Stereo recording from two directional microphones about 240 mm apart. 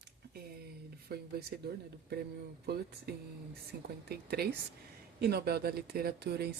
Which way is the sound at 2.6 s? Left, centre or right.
Right.